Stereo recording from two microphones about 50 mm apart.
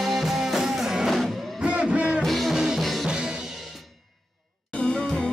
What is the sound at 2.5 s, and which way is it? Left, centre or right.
Music, centre.